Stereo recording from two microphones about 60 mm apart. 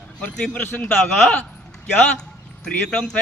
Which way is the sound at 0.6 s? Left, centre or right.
Left.